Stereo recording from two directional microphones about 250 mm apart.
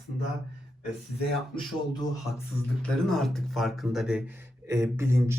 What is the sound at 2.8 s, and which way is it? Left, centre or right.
Speech, centre.